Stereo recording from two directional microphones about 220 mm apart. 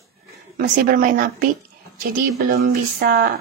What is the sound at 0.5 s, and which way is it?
Speech, 40° right (ahead or behind).